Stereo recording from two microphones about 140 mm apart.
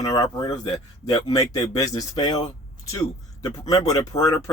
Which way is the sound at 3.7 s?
25° left (ahead or behind).